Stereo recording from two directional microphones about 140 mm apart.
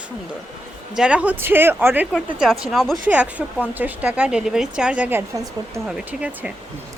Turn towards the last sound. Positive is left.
turn(degrees=-10)  # may be behind; listen again after turning